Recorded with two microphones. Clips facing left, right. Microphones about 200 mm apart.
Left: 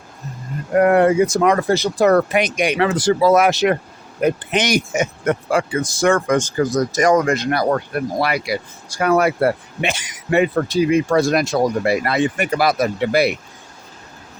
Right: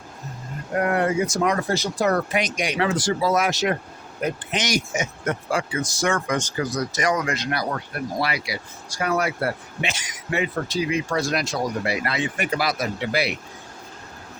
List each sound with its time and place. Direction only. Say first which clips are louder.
0.9 s speech: left 8 dB; 65° left (ahead or behind)